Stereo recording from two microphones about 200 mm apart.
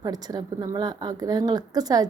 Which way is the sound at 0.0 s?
20° right (ahead or behind).